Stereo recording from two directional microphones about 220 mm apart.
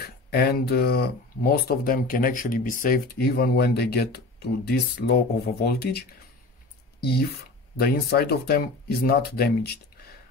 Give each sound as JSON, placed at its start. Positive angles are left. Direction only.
{"t": 0.0, "sound": "speech", "side_deg": 45}